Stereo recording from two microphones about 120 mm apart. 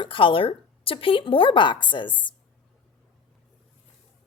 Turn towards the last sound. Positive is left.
turn(degrees=40)  # may be behind; listen again after turning